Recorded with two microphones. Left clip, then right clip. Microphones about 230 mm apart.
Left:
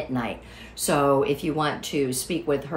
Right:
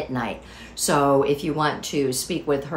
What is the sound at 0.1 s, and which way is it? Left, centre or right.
Speech, centre.